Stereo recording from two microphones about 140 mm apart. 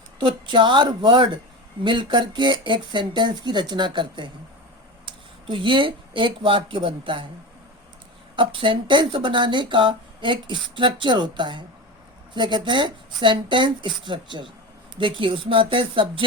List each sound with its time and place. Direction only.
0.2 s speech: 35° right (ahead or behind)
8.4 s speech: 35° right (ahead or behind)